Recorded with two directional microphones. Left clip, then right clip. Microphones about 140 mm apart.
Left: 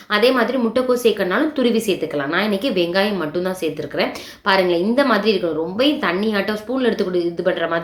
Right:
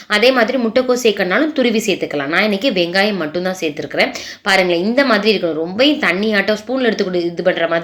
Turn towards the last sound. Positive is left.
turn(degrees=-15)  # may be behind; listen again after turning